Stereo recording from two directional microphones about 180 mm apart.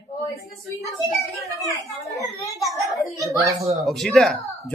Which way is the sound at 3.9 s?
Centre (ahead or behind).